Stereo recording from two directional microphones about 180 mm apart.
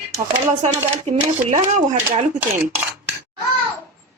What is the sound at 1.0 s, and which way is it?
Speech, 45° right (ahead or behind).